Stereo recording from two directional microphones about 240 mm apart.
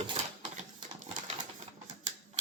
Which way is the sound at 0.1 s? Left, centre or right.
Right.